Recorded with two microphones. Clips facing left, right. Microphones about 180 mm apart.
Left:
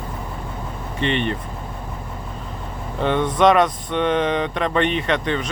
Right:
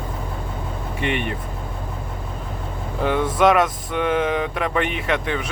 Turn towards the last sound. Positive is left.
turn(degrees=-5)  # may be behind; listen again after turning